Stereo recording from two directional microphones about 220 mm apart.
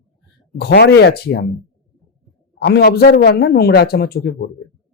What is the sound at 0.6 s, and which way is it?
Speech, 50° left (ahead or behind).